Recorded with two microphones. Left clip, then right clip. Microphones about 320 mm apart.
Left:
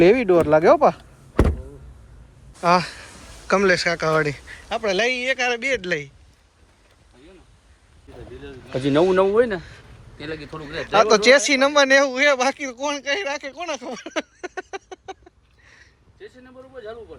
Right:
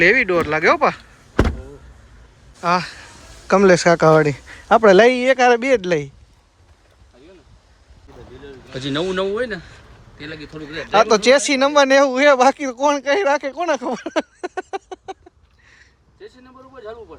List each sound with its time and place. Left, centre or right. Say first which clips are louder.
0.0 s speech: right 1 dB; centre
2.6 s speech: left 1 dB; centre
9.0 s speech: left 5 dB; centre
10.8 s speech: right 1 dB; centre
15.6 s a sound: right 1 dB; centre